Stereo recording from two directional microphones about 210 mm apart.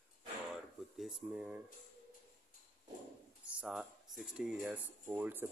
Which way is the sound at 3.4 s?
5° right (ahead or behind).